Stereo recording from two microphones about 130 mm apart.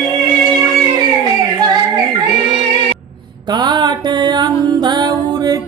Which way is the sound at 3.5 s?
35° right (ahead or behind).